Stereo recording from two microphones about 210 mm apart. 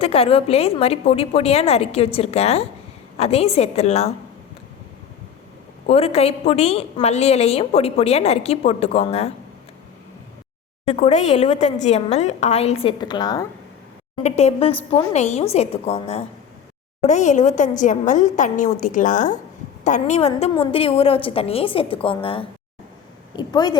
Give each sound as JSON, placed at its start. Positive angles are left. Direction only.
{"t": 0.0, "sound": "a woman's voice", "side_deg": 25}
{"t": 5.8, "sound": "a woman's voice", "side_deg": 30}
{"t": 10.8, "sound": "a woman's voice", "side_deg": 30}
{"t": 14.2, "sound": "a woman's voice", "side_deg": 30}